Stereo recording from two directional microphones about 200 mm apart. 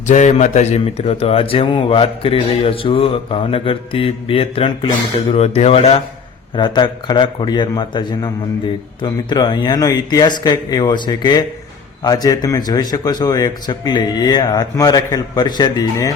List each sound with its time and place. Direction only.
0.1 s speech: 35° left (ahead or behind); by 16.1 s 15° left (ahead or behind)